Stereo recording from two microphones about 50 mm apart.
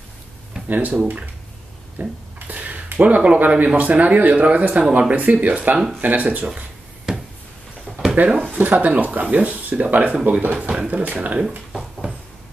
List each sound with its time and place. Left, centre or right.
0.7 s speech: right
2.0 s a sound: right
3.3 s speech: right
7.1 s a sound: centre
8.3 s speech: right
8.5 s speech: right